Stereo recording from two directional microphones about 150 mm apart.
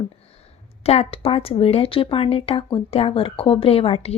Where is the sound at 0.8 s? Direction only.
45° left (ahead or behind).